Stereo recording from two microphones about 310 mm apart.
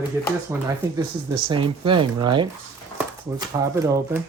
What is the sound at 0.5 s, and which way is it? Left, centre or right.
Speech, centre.